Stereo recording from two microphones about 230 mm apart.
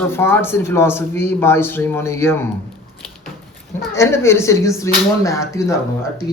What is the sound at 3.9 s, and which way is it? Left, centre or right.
Speech, centre.